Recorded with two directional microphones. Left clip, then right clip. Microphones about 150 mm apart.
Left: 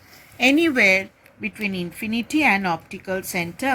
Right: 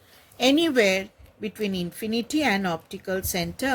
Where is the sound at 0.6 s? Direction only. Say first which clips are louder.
Left 4 dB; 55° right (ahead or behind).